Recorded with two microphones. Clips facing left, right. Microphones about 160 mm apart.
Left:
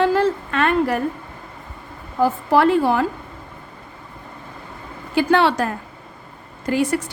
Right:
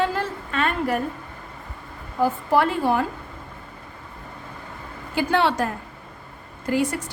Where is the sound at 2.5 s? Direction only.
85° left.